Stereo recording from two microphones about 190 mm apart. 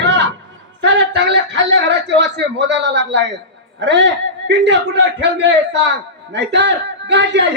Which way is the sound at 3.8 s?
65° right (ahead or behind).